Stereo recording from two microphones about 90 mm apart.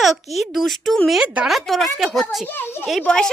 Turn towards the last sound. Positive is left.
turn(degrees=5)  # may be behind; listen again after turning